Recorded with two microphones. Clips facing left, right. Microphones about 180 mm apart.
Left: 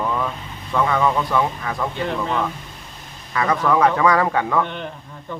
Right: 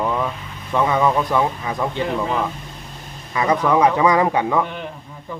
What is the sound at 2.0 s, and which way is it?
Speech, 5° right (ahead or behind).